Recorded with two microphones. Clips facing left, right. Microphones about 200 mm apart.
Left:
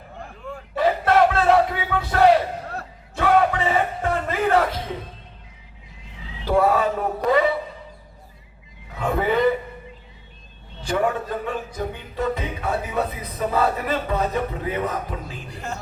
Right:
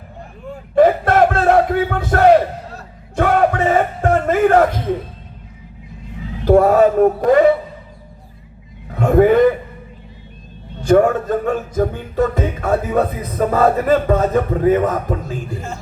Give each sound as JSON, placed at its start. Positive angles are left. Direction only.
{"t": 0.8, "sound": "crowd", "side_deg": -50}
{"t": 3.2, "sound": "music", "side_deg": -45}
{"t": 6.1, "sound": "speech", "side_deg": -50}
{"t": 8.9, "sound": "a sound", "side_deg": -50}
{"t": 10.8, "sound": "speech", "side_deg": -45}